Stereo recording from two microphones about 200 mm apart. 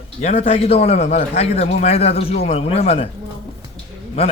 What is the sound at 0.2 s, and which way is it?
A man's voice, 35° left (ahead or behind).